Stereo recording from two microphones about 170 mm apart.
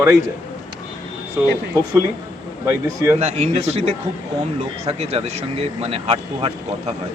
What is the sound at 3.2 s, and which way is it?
Speech, 40° right (ahead or behind).